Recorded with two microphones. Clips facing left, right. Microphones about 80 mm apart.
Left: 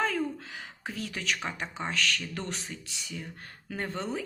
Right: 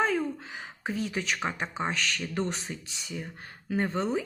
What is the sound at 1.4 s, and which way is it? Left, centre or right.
Speech, right.